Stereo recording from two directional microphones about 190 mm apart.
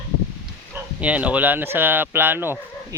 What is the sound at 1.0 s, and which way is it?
Speech, 5° right (ahead or behind).